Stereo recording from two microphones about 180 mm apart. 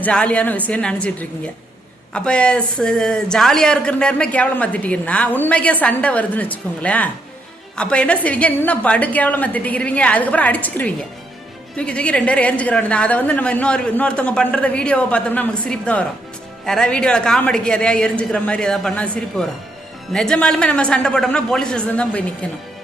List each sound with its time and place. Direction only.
0.0 s a woman's voice: 5° left (ahead or behind)